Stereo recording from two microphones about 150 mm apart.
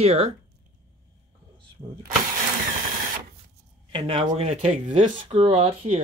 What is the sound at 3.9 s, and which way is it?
Speech, 35° right (ahead or behind).